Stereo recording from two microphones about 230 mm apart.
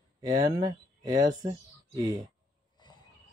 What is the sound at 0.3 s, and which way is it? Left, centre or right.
Speech, centre.